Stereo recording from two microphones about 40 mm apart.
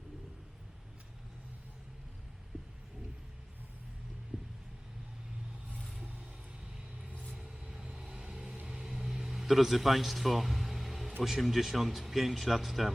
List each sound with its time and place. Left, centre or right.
2.5 s heart sounds: centre
4.3 s heart sounds: right
7.1 s vehicle: right
7.7 s vehicle: centre
11.2 s a man's voice: centre